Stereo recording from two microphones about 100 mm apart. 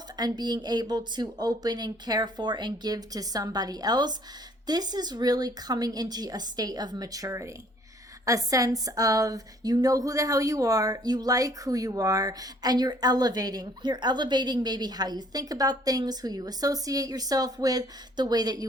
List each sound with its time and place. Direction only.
0.2 s speech: 45° right (ahead or behind)